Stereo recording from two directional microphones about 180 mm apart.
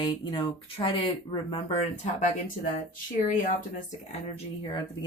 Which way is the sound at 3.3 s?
45° left (ahead or behind).